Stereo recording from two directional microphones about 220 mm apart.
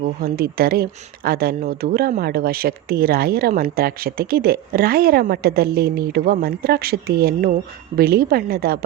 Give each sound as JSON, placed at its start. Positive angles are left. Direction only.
{"t": 0.0, "sound": "speech", "side_deg": -40}